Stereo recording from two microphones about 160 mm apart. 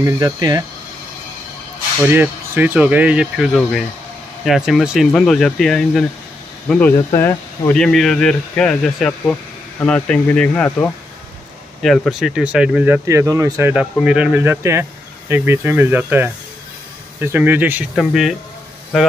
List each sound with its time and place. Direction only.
0.0 s speech: 25° right (ahead or behind)
2.0 s speech: 10° right (ahead or behind)
17.9 s speech: centre (ahead or behind)